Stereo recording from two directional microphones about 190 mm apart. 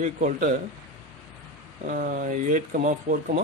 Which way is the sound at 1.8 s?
45° right (ahead or behind).